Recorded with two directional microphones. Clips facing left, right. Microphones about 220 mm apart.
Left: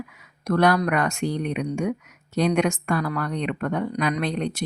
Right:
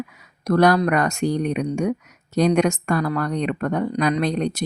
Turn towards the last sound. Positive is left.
turn(degrees=-40)  # may be behind; listen again after turning